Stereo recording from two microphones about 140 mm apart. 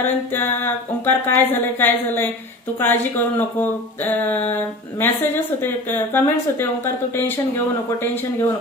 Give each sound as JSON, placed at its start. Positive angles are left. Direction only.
{"t": 0.0, "sound": "speech", "side_deg": 15}